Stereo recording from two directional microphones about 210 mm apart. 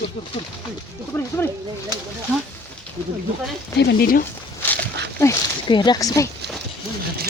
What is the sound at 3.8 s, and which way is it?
Speech, 50° left (ahead or behind).